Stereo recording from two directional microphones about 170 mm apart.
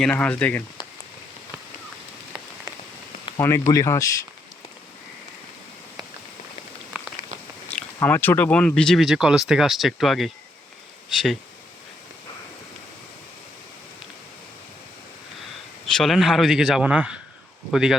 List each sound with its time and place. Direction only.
0.0 s speech: 5° left (ahead or behind)
3.3 s speech: 15° left (ahead or behind)
7.9 s speech: 10° left (ahead or behind)
15.9 s speech: centre (ahead or behind)